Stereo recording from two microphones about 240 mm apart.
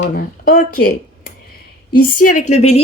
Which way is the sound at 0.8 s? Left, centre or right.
Left.